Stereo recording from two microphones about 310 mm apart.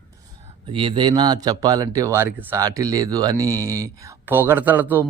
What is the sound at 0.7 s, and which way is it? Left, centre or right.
Speech, centre.